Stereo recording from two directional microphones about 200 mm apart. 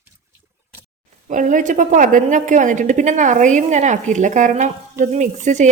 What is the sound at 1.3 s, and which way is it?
A woman's voice, 40° right (ahead or behind).